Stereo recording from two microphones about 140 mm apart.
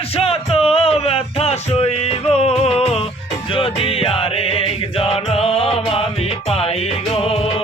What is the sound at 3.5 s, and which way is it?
Music, 40° left (ahead or behind).